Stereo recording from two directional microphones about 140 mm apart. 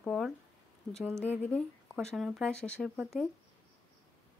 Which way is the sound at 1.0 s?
15° right (ahead or behind).